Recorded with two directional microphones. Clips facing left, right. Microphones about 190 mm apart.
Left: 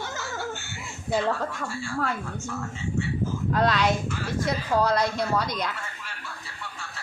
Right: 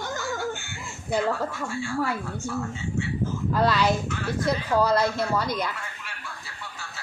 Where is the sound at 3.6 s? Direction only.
5° right (ahead or behind).